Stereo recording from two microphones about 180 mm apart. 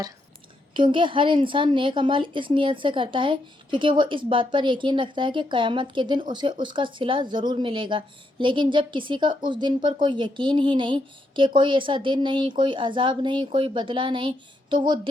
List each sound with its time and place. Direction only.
0.7 s a woman's voice: 25° right (ahead or behind)